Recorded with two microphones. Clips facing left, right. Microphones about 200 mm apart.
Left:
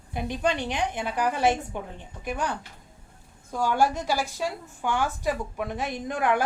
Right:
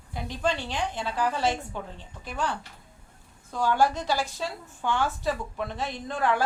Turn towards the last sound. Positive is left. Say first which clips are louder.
# left 2 dB
turn(degrees=15)  # may be behind; listen again after turning